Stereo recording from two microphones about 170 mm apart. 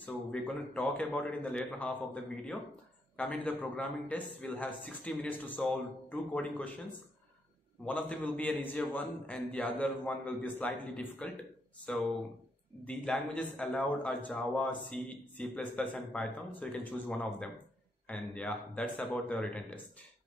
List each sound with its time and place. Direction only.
0.0 s a man's voice: 5° left (ahead or behind)
7.8 s a man's voice: 5° left (ahead or behind)